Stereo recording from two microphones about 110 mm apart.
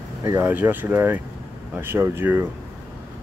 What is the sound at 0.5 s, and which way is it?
Speech, 15° right (ahead or behind).